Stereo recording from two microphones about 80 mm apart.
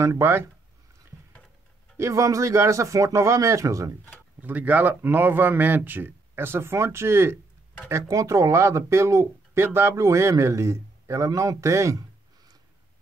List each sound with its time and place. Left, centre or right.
0.0 s a man's voice: right
2.0 s speech: right
4.4 s a man's voice: right